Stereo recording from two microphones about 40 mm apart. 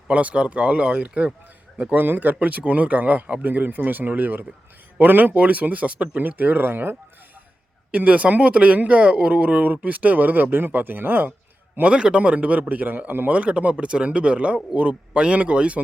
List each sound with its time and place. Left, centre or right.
0.1 s speech: right
2.0 s speech: right
2.4 s speech: right
7.9 s speech: right
11.9 s speech: right
13.3 s speech: right